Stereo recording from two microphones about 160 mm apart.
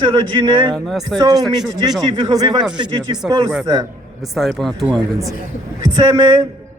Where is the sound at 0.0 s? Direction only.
30° right (ahead or behind).